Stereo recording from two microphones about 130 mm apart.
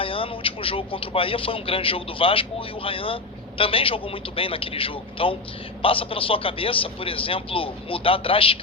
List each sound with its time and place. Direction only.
0.0 s speech: 45° left (ahead or behind)